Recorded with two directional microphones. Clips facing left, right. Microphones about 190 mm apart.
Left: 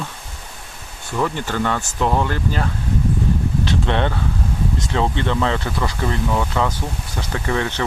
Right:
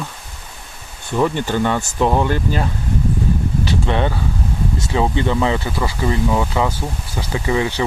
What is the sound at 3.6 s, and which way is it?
Speech, 5° right (ahead or behind).